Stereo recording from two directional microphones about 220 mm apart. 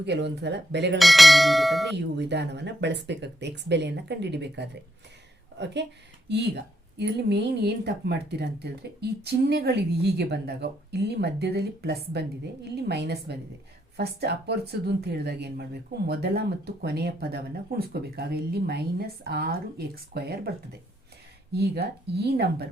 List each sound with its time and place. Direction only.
0.0 s speech: 50° right (ahead or behind)
0.9 s bell: centre (ahead or behind)
2.0 s speech: 50° right (ahead or behind)
21.5 s speech: 45° right (ahead or behind)